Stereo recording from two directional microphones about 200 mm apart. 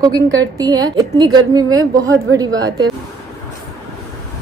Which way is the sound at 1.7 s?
85° right.